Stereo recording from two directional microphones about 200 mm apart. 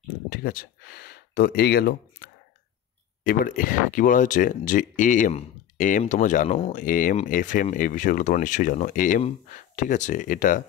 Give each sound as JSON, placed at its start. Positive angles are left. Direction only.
{"t": 0.3, "sound": "speech", "side_deg": 50}